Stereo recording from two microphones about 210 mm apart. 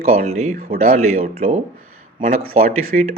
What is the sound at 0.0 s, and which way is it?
Speech, 30° right (ahead or behind).